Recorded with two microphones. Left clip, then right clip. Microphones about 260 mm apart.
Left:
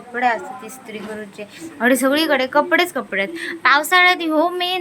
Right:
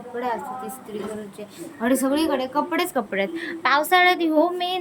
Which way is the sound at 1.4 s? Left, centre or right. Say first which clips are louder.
Left 10 dB; centre.